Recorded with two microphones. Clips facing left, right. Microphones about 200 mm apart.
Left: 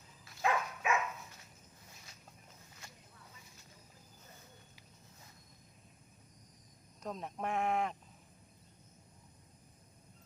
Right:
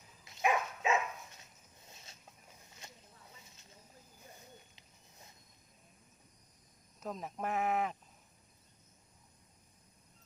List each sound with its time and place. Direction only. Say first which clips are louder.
0.3 s dog: right 2 dB; 20° right (ahead or behind)
1.9 s a sound: right 3 dB; 25° right (ahead or behind)
7.0 s speech: even; centre (ahead or behind)